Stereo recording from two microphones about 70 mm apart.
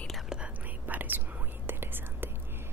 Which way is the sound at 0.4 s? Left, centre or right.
Right.